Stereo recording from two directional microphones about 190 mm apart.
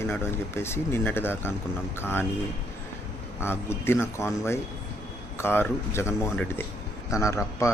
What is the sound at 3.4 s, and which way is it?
Speech, 10° left (ahead or behind).